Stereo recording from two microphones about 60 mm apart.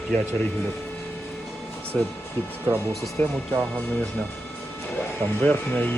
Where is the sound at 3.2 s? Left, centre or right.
Left.